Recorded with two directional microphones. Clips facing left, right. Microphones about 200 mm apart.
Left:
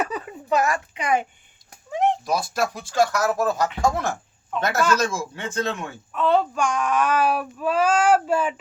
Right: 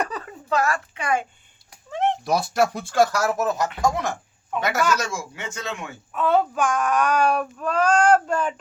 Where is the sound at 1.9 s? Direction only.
10° left (ahead or behind).